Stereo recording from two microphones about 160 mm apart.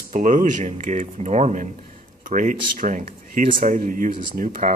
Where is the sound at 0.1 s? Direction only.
55° right (ahead or behind).